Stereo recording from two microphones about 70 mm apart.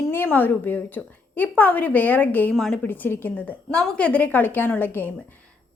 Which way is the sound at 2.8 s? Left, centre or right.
Left.